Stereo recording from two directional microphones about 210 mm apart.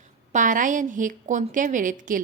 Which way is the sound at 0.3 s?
40° right (ahead or behind).